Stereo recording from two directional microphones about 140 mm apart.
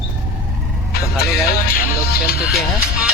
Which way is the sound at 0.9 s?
90° left.